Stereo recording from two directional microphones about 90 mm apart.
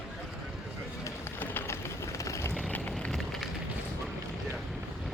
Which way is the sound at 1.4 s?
25° left (ahead or behind).